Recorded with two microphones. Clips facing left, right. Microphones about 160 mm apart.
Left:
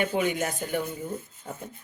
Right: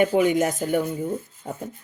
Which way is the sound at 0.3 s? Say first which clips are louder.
Right 7 dB; 45° right (ahead or behind).